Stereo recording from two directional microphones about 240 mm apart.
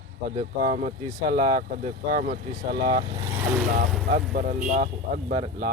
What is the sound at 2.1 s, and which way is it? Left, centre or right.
Speech, right.